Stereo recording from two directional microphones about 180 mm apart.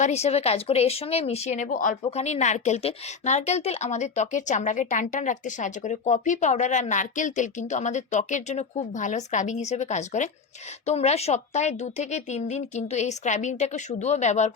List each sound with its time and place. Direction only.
0.0 s speech: 35° left (ahead or behind)